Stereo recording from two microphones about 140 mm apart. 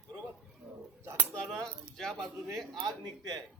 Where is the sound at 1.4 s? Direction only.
5° left (ahead or behind).